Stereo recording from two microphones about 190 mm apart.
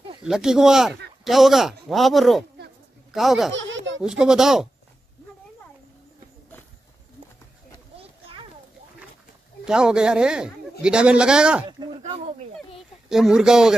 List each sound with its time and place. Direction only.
0.2 s speech: 5° right (ahead or behind)
3.5 s a sound: 75° right (ahead or behind)
4.0 s speech: 5° right (ahead or behind)
8.0 s children playing: 30° right (ahead or behind)
9.7 s speech: 5° right (ahead or behind)
12.0 s speech: 35° right (ahead or behind)
12.5 s a sound: centre (ahead or behind)